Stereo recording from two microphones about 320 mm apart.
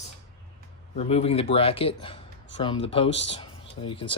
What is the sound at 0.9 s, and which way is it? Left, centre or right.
A man's voice, centre.